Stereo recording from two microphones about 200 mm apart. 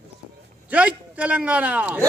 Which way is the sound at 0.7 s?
5° right (ahead or behind).